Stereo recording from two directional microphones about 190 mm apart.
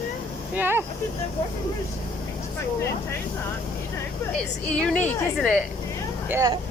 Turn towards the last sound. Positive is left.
turn(degrees=-15)  # may be behind; listen again after turning